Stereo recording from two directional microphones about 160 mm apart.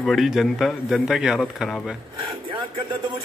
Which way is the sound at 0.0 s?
Centre (ahead or behind).